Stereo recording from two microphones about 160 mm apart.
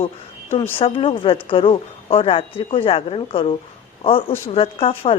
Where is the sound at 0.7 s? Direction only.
35° left (ahead or behind).